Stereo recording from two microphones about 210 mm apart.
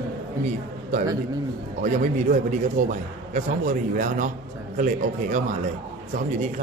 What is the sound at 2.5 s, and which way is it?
A man's voice, 35° right (ahead or behind).